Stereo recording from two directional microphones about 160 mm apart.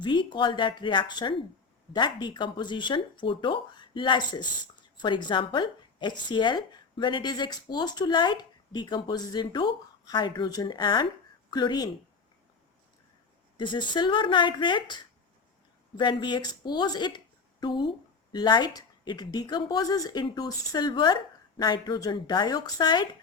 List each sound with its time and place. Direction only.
0.0 s speech: 30° left (ahead or behind)
13.6 s speech: 30° left (ahead or behind)